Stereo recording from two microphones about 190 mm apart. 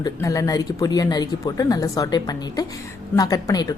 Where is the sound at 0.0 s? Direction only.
15° left (ahead or behind).